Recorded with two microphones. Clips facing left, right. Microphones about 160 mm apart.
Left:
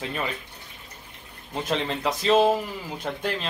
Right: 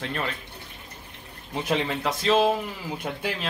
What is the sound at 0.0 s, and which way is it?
Speech, 5° left (ahead or behind).